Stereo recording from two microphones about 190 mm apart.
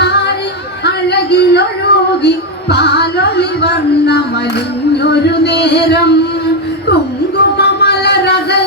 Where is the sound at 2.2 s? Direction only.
60° left (ahead or behind).